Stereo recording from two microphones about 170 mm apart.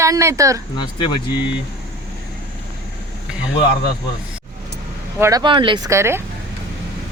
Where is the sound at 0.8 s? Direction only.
30° left (ahead or behind).